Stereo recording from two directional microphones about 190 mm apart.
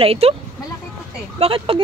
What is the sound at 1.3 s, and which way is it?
Speech, 30° right (ahead or behind).